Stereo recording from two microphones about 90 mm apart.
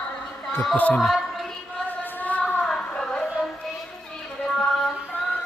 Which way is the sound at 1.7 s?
20° left (ahead or behind).